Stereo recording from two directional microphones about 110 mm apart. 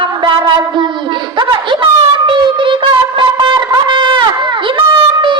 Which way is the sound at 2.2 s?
50° right (ahead or behind).